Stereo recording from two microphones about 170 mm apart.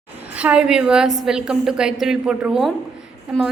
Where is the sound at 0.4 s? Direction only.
5° right (ahead or behind).